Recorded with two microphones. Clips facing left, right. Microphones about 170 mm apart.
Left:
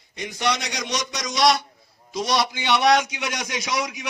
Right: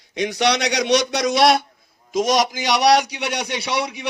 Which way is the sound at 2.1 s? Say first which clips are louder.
Right 5 dB; 45° right (ahead or behind).